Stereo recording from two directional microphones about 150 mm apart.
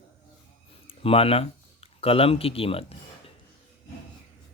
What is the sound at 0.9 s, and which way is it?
Speech, 40° left (ahead or behind).